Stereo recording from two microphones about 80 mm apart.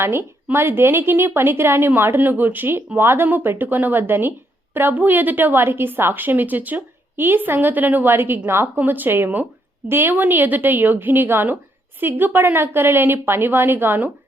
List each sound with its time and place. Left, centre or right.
0.0 s a woman's voice: right